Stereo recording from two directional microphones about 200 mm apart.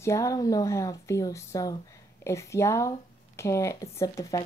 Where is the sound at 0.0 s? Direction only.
15° left (ahead or behind).